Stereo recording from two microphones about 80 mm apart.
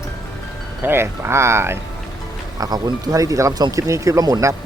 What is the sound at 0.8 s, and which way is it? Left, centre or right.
Speech, right.